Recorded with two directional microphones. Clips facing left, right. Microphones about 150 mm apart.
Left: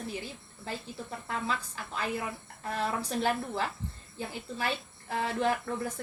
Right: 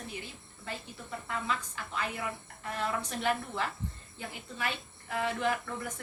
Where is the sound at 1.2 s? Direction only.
35° left (ahead or behind).